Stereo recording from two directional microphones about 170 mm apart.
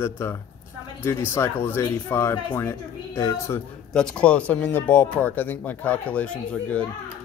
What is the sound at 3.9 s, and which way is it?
Speech, 5° left (ahead or behind).